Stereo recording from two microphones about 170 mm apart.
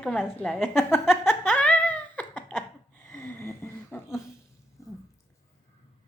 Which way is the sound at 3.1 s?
15° left (ahead or behind).